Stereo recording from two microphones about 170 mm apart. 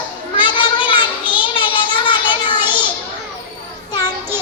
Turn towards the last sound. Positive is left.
turn(degrees=25)  # may be behind; listen again after turning